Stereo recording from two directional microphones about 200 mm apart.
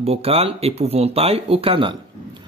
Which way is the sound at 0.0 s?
30° right (ahead or behind).